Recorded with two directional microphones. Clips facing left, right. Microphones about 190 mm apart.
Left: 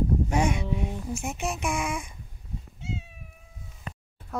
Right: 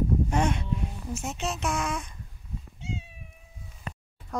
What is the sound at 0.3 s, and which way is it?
Speech, 10° left (ahead or behind).